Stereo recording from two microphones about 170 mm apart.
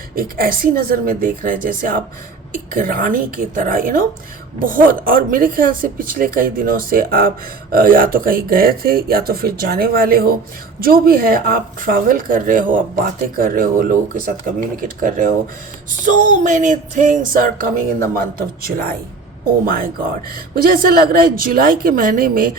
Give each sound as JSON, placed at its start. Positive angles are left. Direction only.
{"t": 0.2, "sound": "speech", "side_deg": -55}